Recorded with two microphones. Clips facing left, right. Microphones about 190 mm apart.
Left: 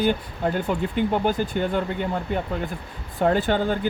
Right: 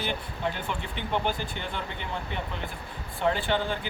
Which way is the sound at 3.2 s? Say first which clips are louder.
Left 6 dB; 45° left (ahead or behind).